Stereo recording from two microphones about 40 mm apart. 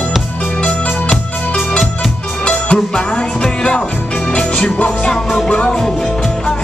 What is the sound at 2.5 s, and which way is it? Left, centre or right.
Music, left.